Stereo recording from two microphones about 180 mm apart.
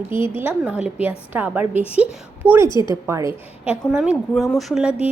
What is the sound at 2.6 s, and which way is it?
Speech, 25° left (ahead or behind).